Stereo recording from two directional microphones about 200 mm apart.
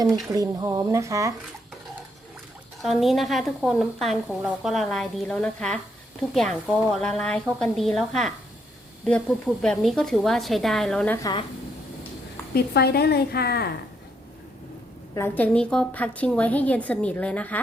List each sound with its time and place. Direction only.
0.0 s speech: 15° right (ahead or behind)
2.8 s a woman's voice: centre (ahead or behind)
12.5 s a woman's voice: 55° left (ahead or behind)
15.1 s a woman's voice: 10° left (ahead or behind)